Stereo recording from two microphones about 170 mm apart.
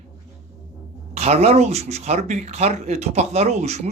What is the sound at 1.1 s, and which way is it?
Speech, 40° right (ahead or behind).